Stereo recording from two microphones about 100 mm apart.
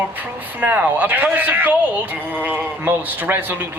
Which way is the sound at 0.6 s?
15° right (ahead or behind).